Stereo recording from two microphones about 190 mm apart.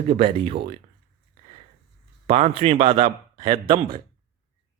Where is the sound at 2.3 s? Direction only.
35° right (ahead or behind).